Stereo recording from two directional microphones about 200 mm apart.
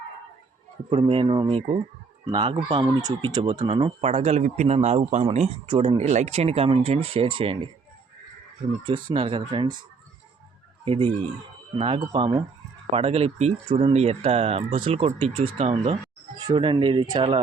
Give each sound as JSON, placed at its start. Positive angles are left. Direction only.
{"t": 0.9, "sound": "speech", "side_deg": -25}
{"t": 9.0, "sound": "speech", "side_deg": -25}
{"t": 10.8, "sound": "speech", "side_deg": -25}